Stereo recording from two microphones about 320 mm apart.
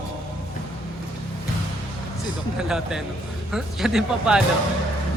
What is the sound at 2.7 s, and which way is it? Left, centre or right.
Speech, centre.